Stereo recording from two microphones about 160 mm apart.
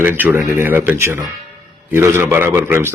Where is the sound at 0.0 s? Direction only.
10° right (ahead or behind).